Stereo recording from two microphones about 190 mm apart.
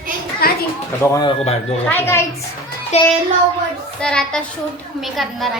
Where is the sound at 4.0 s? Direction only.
5° left (ahead or behind).